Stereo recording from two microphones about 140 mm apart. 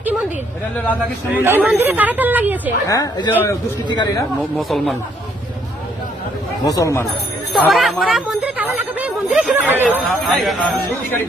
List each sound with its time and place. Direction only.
1.3 s speech: 15° right (ahead or behind)
2.8 s speech: 25° left (ahead or behind)
4.5 s speech: centre (ahead or behind)
6.7 s speech: 25° left (ahead or behind)
7.5 s speech: centre (ahead or behind)
10.2 s speech: centre (ahead or behind)